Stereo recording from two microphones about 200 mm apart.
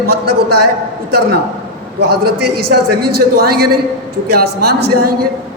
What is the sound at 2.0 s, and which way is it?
A man's voice, 55° right (ahead or behind).